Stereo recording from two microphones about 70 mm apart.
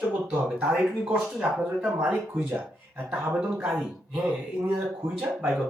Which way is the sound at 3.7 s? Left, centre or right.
Centre.